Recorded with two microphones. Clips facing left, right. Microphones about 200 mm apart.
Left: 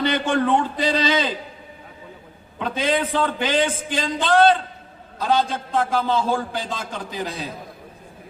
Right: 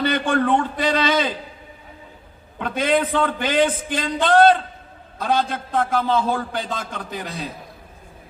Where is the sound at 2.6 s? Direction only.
50° right (ahead or behind).